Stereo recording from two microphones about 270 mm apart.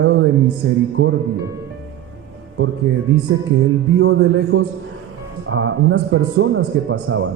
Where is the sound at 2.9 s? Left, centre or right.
Right.